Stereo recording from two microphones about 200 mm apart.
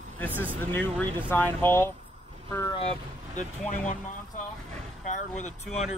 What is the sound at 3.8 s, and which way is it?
Speech, 35° left (ahead or behind).